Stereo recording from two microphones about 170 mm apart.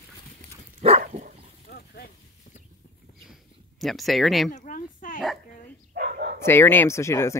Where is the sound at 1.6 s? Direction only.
70° left (ahead or behind).